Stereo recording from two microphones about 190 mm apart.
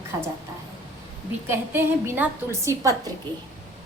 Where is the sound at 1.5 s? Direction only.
10° right (ahead or behind).